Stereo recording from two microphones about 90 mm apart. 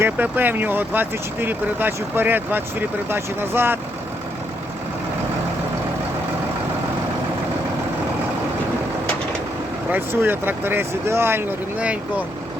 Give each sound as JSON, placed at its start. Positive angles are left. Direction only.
{"t": 0.0, "sound": "speech", "side_deg": -20}
{"t": 9.9, "sound": "speech", "side_deg": -25}